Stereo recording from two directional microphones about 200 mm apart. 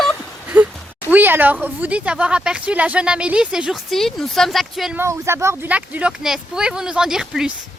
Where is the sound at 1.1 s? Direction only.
10° right (ahead or behind).